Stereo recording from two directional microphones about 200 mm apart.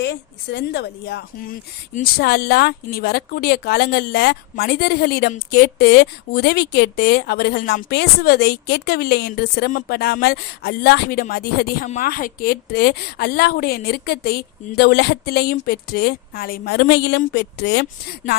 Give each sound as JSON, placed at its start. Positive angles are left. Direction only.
{"t": 0.0, "sound": "speech", "side_deg": 60}